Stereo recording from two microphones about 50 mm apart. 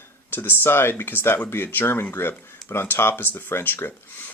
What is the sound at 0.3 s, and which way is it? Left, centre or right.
Speech, left.